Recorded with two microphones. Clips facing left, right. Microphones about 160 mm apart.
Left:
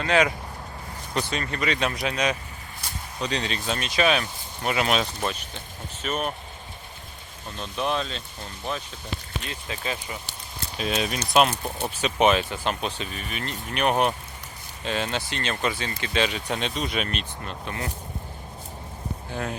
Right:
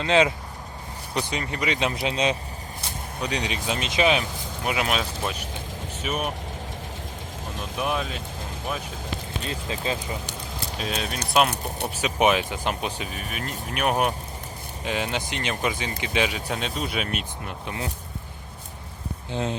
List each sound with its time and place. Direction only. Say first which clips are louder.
0.0 s speech: right 1 dB; 20° right (ahead or behind)
3.2 s speech: even; 10° right (ahead or behind)
4.7 s speech: left 2 dB; 5° right (ahead or behind)
7.6 s speech: left 1 dB; 10° right (ahead or behind)
9.4 s speech: right 4 dB; 30° right (ahead or behind)
10.8 s speech: left 4 dB; 5° left (ahead or behind)
11.9 s speech: left 1 dB; 10° right (ahead or behind)
19.3 s speech: right 4 dB; 20° right (ahead or behind)